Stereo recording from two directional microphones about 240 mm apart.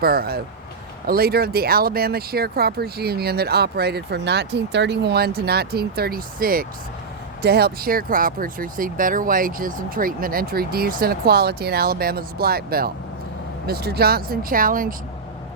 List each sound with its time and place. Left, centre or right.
0.0 s speech: right